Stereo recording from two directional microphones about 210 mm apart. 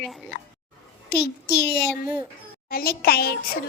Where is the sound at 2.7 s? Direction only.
45° left (ahead or behind).